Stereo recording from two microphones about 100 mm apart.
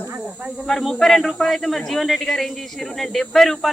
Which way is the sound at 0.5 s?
5° left (ahead or behind).